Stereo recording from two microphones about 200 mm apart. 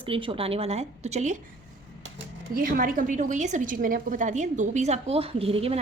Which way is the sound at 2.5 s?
45° right (ahead or behind).